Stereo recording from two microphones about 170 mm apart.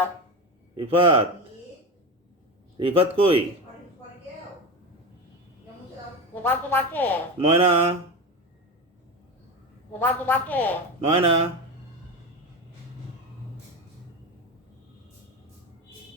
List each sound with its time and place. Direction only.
0.8 s speech: 30° right (ahead or behind)
2.7 s speech: 30° right (ahead or behind)
6.3 s a woman's voice: 10° left (ahead or behind)
7.3 s speech: 35° right (ahead or behind)
10.0 s a woman's voice: 10° left (ahead or behind)
11.0 s speech: 35° right (ahead or behind)